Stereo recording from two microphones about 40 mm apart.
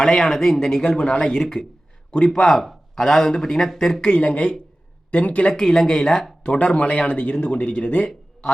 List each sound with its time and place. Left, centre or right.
0.0 s speech: centre
4.0 s speech: left
5.5 s speech: centre
6.4 s speech: left